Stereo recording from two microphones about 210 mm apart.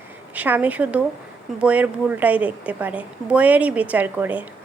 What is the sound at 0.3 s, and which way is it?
A woman's voice, 10° right (ahead or behind).